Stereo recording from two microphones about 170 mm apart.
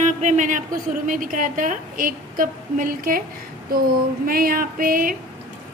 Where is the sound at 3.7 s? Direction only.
60° right (ahead or behind).